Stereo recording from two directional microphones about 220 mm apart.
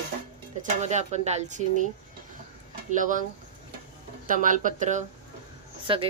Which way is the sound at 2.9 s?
35° right (ahead or behind).